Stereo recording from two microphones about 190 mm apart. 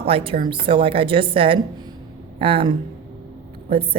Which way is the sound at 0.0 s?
30° right (ahead or behind).